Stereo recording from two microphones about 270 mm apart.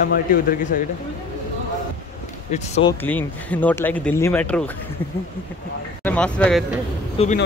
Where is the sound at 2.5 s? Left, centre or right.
Left.